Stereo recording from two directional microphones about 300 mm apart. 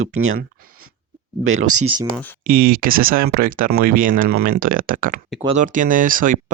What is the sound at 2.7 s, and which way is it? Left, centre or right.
Speech, right.